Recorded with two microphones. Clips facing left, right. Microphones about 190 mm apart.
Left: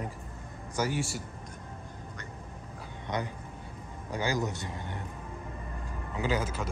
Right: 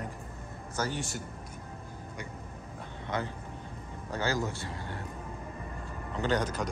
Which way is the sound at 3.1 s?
20° left (ahead or behind).